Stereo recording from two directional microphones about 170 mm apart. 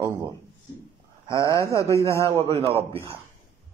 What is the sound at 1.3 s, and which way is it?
Speech, 20° left (ahead or behind).